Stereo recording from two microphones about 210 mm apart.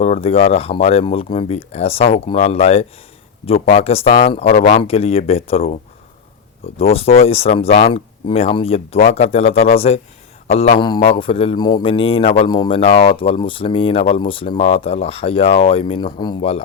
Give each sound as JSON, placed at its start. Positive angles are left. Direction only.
{"t": 0.0, "sound": "speech", "side_deg": 30}